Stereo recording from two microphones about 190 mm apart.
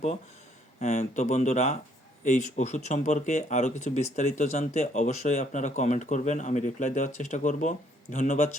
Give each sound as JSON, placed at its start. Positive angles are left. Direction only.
{"t": 0.8, "sound": "speech", "side_deg": 40}